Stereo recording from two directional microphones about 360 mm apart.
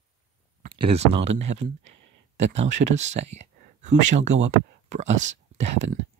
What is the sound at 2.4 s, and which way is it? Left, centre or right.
Speech, centre.